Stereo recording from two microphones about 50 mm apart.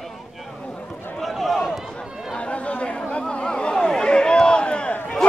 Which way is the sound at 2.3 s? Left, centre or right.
Left.